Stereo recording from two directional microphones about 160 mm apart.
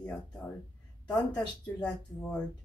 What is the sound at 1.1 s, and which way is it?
Speech, 5° left (ahead or behind).